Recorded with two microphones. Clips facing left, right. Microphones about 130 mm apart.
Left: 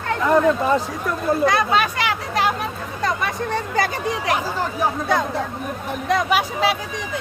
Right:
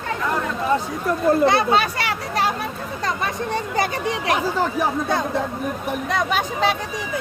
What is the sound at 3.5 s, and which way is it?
Speech, 25° right (ahead or behind).